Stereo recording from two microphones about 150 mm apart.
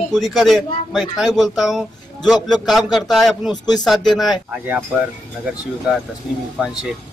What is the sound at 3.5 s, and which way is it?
Speech, 25° left (ahead or behind).